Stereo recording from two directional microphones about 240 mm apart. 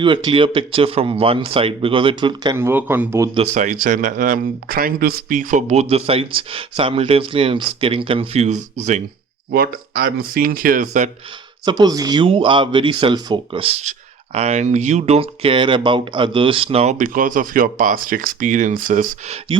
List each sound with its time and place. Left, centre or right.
0.0 s speech: centre
3.3 s speech: right
11.6 s speech: centre